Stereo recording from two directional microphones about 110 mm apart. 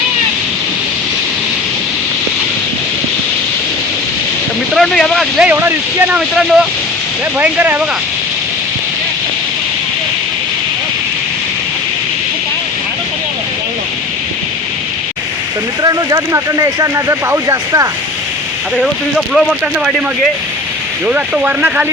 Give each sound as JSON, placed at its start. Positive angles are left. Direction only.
{"t": 4.7, "sound": "speech", "side_deg": 5}
{"t": 5.4, "sound": "speech", "side_deg": -15}
{"t": 6.1, "sound": "speech", "side_deg": -5}
{"t": 7.3, "sound": "speech", "side_deg": -15}
{"t": 15.8, "sound": "speech", "side_deg": -35}
{"t": 18.8, "sound": "speech", "side_deg": -5}
{"t": 21.1, "sound": "speech", "side_deg": -15}